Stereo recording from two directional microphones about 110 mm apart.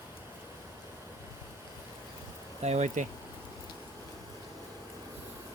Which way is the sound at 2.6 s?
85° right.